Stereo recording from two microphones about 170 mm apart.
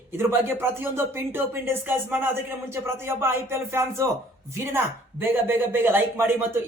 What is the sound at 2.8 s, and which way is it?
Speech, 15° right (ahead or behind).